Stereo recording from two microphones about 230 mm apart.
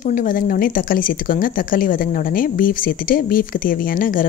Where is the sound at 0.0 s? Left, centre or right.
Left.